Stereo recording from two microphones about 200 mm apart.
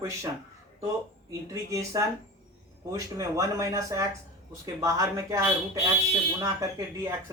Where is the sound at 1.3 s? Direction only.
15° right (ahead or behind).